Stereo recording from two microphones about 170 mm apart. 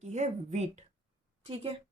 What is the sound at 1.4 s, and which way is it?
Speech, 30° right (ahead or behind).